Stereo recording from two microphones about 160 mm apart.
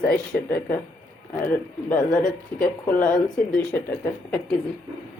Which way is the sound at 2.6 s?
60° left (ahead or behind).